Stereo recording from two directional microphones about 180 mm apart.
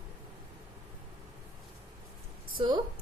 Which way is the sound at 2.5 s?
25° right (ahead or behind).